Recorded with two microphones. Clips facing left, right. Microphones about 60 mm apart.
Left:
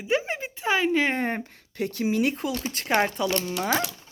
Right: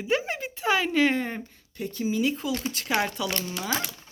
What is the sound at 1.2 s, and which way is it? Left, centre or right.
Speech, left.